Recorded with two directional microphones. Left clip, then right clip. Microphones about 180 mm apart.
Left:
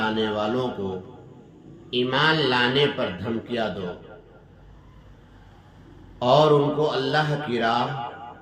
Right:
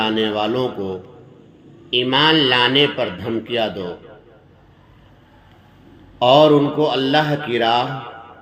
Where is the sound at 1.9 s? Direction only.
30° right (ahead or behind).